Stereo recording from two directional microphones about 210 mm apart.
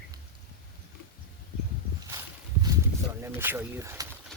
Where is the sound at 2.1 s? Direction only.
15° right (ahead or behind).